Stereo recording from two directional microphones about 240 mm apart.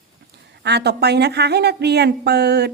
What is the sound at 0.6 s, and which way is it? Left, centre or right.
A woman's voice, right.